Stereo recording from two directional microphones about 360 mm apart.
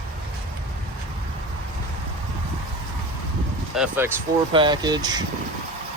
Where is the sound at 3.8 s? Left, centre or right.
Centre.